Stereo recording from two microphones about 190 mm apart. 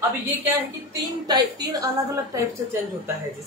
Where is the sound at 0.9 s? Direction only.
20° right (ahead or behind).